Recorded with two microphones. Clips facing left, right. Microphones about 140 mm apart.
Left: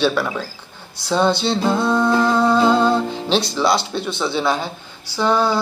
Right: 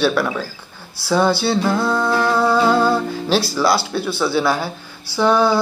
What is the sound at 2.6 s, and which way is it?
Music, 20° left (ahead or behind).